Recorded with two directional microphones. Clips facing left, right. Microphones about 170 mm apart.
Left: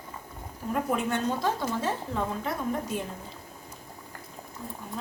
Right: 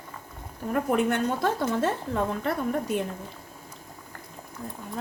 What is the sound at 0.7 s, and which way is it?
A woman's voice, 65° right (ahead or behind).